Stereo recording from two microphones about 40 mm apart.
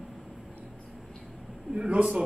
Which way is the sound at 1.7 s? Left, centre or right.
Right.